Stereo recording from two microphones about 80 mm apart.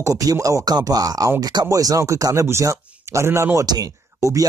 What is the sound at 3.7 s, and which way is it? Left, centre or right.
Speech, right.